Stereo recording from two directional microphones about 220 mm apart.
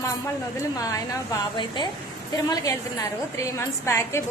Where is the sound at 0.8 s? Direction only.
15° left (ahead or behind).